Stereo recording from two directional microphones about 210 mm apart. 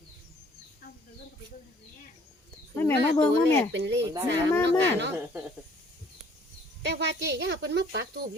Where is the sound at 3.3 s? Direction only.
55° right (ahead or behind).